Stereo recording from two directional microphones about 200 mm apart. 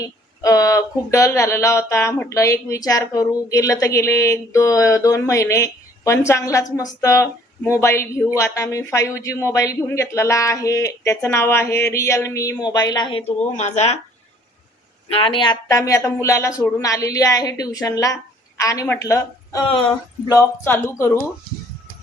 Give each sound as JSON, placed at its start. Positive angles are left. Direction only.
{"t": 0.0, "sound": "a woman's voice", "side_deg": 15}
{"t": 15.1, "sound": "speech", "side_deg": 25}